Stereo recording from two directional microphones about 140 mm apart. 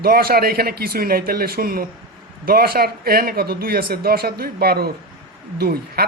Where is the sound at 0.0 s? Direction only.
90° right.